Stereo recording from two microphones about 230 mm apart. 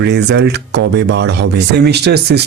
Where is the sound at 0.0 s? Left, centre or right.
Right.